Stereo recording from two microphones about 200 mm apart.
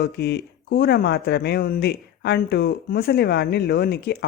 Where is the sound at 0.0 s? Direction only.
55° left (ahead or behind).